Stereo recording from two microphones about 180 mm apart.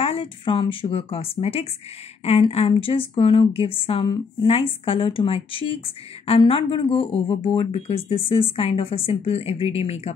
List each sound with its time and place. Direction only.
0.0 s speech: 30° left (ahead or behind)